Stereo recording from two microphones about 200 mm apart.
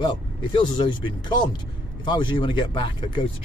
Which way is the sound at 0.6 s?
25° left (ahead or behind).